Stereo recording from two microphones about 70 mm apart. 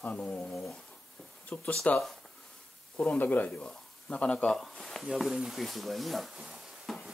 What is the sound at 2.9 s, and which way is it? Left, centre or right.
Speech, left.